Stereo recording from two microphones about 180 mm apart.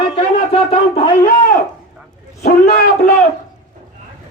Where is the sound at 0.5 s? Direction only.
35° left (ahead or behind).